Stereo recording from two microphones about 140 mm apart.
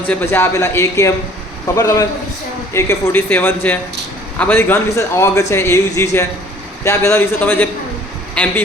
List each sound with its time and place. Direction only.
0.1 s a man's voice: 15° left (ahead or behind)